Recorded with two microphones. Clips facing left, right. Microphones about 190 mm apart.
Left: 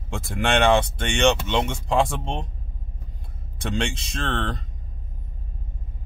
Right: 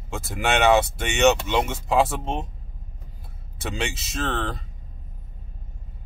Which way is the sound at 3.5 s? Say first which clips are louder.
Left 3 dB; 5° right (ahead or behind).